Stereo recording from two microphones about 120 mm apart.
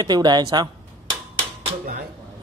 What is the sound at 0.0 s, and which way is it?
Speech, 35° right (ahead or behind).